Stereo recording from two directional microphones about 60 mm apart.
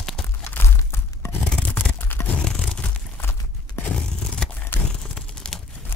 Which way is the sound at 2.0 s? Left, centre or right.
Left.